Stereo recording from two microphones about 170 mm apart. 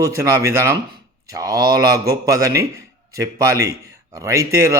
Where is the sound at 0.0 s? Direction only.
15° right (ahead or behind).